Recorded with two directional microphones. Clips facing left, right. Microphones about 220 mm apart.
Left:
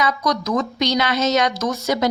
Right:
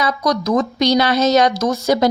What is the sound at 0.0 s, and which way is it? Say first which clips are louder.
A woman's voice: right 3 dB; 40° right (ahead or behind).